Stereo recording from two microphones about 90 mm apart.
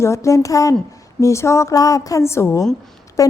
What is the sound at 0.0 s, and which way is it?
A woman's voice, 30° left (ahead or behind).